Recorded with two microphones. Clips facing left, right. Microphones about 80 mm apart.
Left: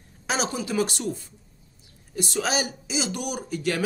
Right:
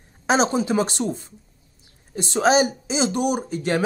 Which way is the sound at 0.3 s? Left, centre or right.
Right.